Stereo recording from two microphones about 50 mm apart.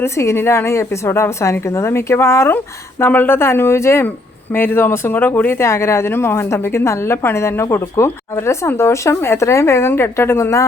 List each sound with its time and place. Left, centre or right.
0.0 s a woman's voice: left
3.1 s speech: left
4.5 s speech: left
5.6 s a woman's voice: left